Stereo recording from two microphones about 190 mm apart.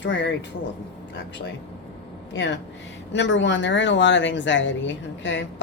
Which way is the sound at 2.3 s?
70° left (ahead or behind).